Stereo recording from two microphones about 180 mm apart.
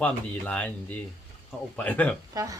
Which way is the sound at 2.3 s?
20° right (ahead or behind).